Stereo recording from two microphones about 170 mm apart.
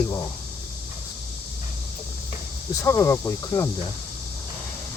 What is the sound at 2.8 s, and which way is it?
Speech, 15° left (ahead or behind).